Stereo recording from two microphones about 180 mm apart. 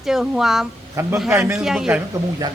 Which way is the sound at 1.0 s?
15° right (ahead or behind).